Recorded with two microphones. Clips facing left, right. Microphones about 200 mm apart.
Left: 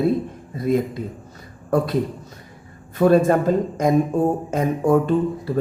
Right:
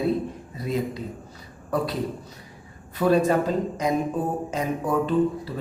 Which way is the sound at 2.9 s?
45° left (ahead or behind).